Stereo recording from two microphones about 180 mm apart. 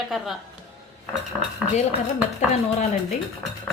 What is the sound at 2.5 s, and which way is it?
Speech, 40° left (ahead or behind).